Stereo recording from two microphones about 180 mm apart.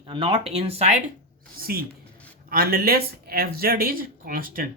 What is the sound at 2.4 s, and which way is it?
Speech, 55° right (ahead or behind).